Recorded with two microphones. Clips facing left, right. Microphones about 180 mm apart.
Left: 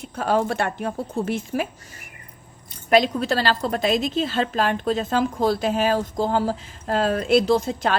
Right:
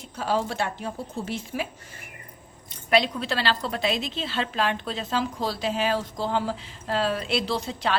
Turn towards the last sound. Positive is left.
turn(degrees=45)  # may be behind; listen again after turning